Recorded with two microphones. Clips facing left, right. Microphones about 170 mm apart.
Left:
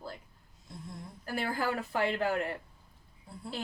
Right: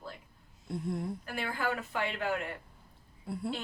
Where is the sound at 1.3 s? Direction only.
35° left (ahead or behind).